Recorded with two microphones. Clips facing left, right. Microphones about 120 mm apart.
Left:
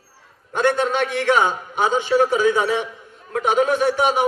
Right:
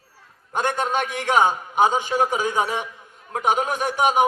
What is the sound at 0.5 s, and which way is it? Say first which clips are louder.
A man's voice: left 4 dB; 45° right (ahead or behind).